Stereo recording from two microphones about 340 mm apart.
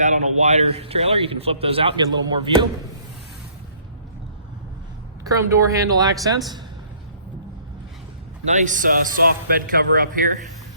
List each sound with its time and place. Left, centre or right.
0.0 s a man's voice: right
5.2 s a man's voice: centre
8.4 s a man's voice: right